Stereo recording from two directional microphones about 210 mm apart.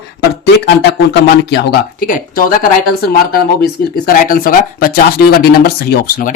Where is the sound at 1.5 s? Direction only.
55° left (ahead or behind).